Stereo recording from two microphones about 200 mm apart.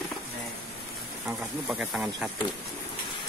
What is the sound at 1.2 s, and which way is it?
Speech, 5° right (ahead or behind).